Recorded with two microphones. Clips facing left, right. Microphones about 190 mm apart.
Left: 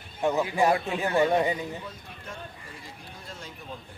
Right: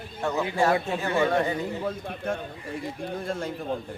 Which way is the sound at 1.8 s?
60° right (ahead or behind).